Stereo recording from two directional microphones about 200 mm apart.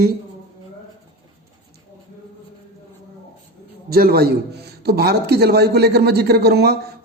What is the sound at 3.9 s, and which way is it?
A man's voice, 50° right (ahead or behind).